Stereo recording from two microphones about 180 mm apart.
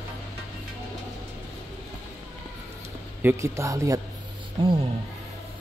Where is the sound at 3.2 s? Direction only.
15° right (ahead or behind).